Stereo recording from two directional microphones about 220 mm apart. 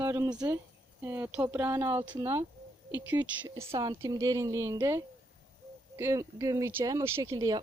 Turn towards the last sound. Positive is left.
turn(degrees=-15)  # may be behind; listen again after turning